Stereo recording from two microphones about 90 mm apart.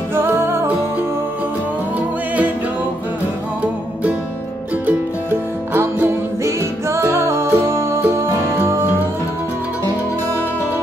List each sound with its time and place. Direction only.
0.1 s music: 25° right (ahead or behind)
5.7 s music: 20° right (ahead or behind)